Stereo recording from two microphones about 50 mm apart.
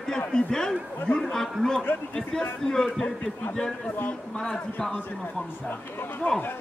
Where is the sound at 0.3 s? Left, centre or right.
Centre.